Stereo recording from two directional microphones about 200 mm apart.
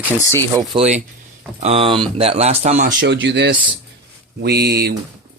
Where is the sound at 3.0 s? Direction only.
65° right (ahead or behind).